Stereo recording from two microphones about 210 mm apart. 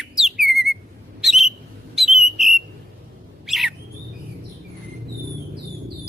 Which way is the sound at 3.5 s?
Centre (ahead or behind).